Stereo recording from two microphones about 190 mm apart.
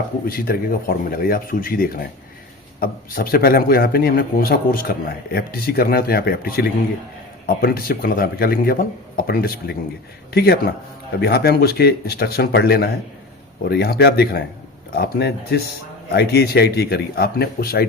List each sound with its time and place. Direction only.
0.3 s a man's voice: 50° left (ahead or behind)